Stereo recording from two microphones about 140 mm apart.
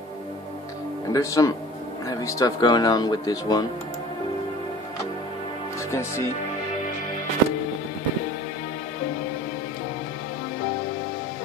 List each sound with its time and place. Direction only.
1.1 s speech: 25° left (ahead or behind)
5.9 s speech: 20° left (ahead or behind)